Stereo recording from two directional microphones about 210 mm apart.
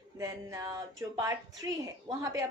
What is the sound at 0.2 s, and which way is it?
A woman's voice, 15° right (ahead or behind).